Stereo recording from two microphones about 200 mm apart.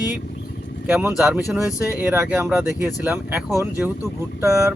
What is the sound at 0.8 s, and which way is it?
Speech, 10° right (ahead or behind).